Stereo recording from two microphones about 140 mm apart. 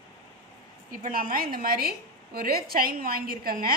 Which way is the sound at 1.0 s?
85° right.